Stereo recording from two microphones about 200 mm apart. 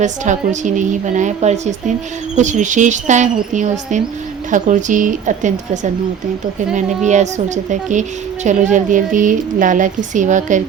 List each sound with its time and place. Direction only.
0.0 s speech: 40° right (ahead or behind)